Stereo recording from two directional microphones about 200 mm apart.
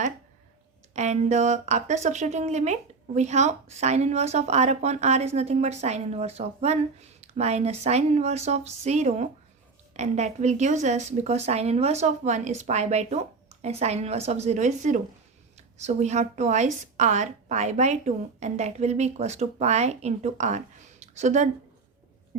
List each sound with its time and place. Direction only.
0.9 s speech: 35° right (ahead or behind)